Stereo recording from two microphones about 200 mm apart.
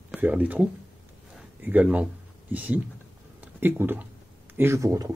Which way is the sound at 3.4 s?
10° right (ahead or behind).